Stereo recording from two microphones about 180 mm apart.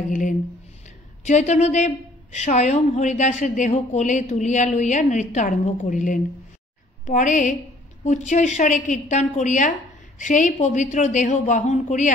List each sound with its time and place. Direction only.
0.1 s a woman's voice: 45° left (ahead or behind)